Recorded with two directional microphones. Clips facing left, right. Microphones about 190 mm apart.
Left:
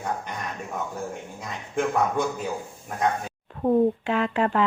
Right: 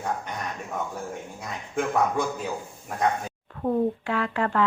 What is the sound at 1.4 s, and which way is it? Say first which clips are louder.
Speech: left 2 dB; 5° right (ahead or behind).